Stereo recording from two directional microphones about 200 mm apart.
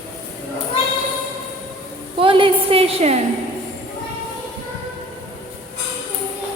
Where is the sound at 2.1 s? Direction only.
25° right (ahead or behind).